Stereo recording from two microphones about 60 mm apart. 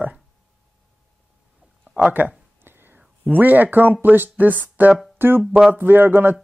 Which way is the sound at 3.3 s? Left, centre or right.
Right.